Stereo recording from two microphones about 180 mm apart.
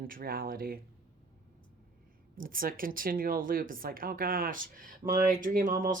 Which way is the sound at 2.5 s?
50° right (ahead or behind).